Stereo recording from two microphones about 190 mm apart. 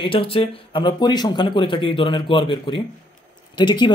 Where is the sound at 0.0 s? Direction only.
25° left (ahead or behind).